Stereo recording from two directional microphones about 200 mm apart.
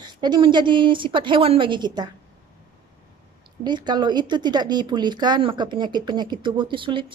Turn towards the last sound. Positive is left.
turn(degrees=-25)  # may be behind; listen again after turning